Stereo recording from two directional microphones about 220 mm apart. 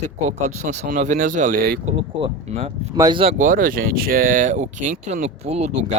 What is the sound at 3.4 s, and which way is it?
Speech, 40° right (ahead or behind).